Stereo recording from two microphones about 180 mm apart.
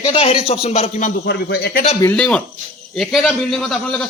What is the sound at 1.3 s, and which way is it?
Speech, 65° left (ahead or behind).